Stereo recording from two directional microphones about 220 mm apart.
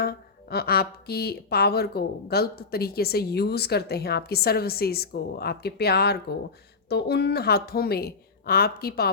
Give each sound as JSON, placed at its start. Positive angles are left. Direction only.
{"t": 0.0, "sound": "speech", "side_deg": 45}